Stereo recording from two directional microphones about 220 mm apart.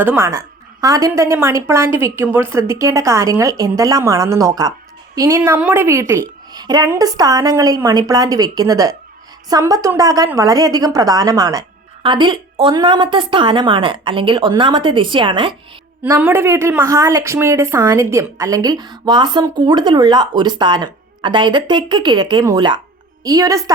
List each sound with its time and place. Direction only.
0.0 s a woman's voice: 10° right (ahead or behind)
16.0 s a woman's voice: 10° right (ahead or behind)